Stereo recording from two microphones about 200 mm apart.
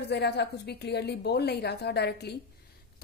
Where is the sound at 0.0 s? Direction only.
55° left (ahead or behind).